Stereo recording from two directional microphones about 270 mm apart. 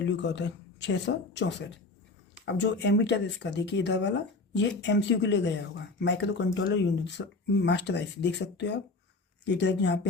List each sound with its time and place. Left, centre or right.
0.0 s speech: left